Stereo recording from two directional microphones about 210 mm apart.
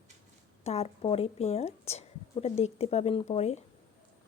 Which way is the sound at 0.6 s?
30° left (ahead or behind).